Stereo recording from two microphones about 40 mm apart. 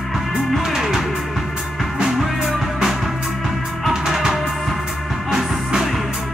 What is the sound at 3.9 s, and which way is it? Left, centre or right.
Music, centre.